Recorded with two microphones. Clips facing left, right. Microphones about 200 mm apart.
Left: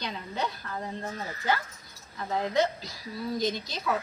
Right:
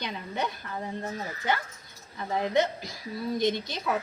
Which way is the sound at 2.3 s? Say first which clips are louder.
Right 1 dB; 20° right (ahead or behind).